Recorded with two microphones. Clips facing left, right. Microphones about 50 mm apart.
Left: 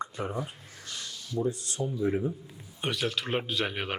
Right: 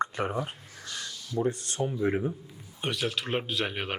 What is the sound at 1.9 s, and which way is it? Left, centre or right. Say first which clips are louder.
Speech: even; right.